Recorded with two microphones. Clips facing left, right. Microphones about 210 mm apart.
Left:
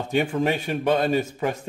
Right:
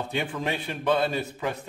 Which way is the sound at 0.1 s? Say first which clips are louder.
Left 10 dB; 40° left (ahead or behind).